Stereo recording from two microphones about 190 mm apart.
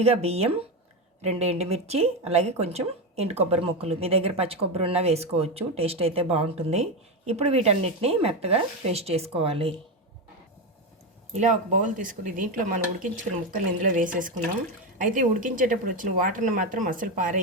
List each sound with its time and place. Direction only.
0.0 s speech: 30° right (ahead or behind)
11.3 s speech: 40° right (ahead or behind)